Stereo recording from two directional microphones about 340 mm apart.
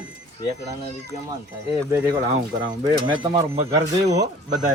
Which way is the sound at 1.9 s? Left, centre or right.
Centre.